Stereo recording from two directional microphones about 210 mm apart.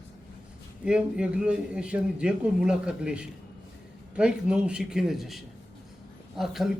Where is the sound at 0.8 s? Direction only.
5° right (ahead or behind).